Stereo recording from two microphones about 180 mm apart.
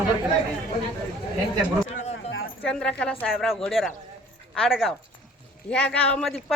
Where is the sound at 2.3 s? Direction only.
90° left.